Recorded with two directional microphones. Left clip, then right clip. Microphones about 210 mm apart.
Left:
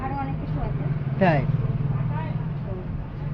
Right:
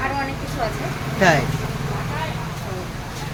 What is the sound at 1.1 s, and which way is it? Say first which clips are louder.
Speech: right 5 dB; 10° right (ahead or behind).